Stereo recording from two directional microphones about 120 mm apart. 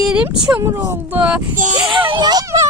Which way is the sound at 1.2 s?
10° right (ahead or behind).